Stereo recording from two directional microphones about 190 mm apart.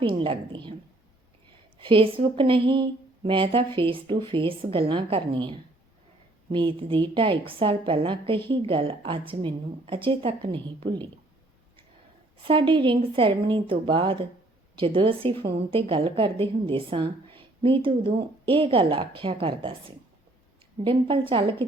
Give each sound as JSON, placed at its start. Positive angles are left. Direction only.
{"t": 0.0, "sound": "speech", "side_deg": -30}
{"t": 1.8, "sound": "speech", "side_deg": -30}
{"t": 12.4, "sound": "speech", "side_deg": -25}
{"t": 20.8, "sound": "speech", "side_deg": -30}